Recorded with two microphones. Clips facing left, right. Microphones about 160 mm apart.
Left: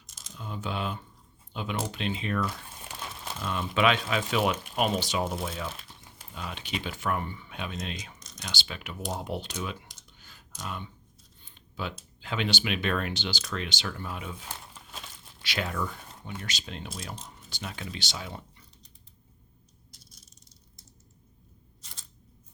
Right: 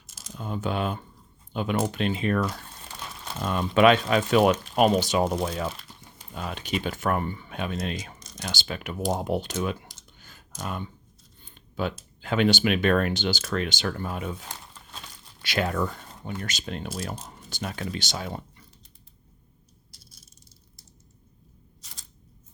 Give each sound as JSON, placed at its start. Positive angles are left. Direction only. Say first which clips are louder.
{"t": 0.3, "sound": "speech", "louder": "right 6 dB", "side_deg": -50}
{"t": 3.4, "sound": "speech", "louder": "right 7 dB", "side_deg": -45}
{"t": 5.7, "sound": "crumpling", "louder": "right 1 dB", "side_deg": 0}
{"t": 6.3, "sound": "speech", "louder": "right 6 dB", "side_deg": -45}
{"t": 11.5, "sound": "a sound", "louder": "right 7 dB", "side_deg": -50}
{"t": 12.2, "sound": "speech", "louder": "right 9 dB", "side_deg": -50}